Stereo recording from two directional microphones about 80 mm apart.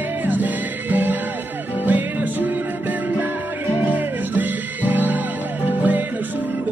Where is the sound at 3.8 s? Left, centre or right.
Right.